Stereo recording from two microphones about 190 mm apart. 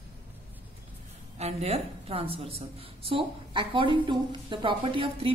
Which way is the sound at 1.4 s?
35° right (ahead or behind).